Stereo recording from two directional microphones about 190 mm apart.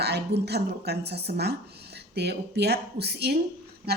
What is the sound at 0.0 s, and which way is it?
Speech, 60° right (ahead or behind).